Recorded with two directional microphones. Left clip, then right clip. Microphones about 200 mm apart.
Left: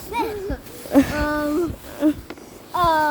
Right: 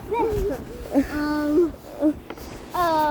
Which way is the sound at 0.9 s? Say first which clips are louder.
Left 5 dB; 45° left (ahead or behind).